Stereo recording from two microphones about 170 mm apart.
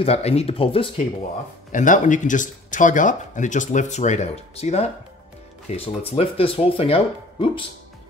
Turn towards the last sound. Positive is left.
turn(degrees=30)  # may be behind; listen again after turning